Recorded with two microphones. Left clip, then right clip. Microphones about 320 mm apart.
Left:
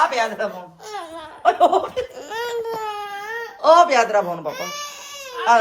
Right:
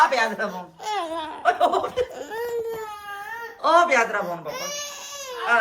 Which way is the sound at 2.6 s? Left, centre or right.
Centre.